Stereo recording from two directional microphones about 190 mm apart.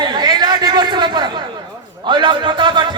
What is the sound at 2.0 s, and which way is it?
Speech, 25° right (ahead or behind).